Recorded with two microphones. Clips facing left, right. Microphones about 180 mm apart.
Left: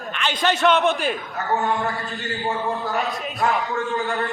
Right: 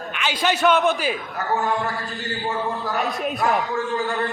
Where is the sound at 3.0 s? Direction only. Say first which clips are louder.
Right 1 dB; centre (ahead or behind).